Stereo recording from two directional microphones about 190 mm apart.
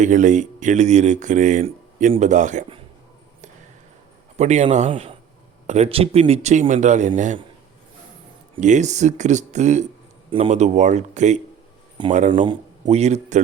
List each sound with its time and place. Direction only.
0.0 s speech: 40° right (ahead or behind)
4.4 s speech: 35° right (ahead or behind)
8.5 s speech: 40° right (ahead or behind)
12.0 s a man's voice: 25° right (ahead or behind)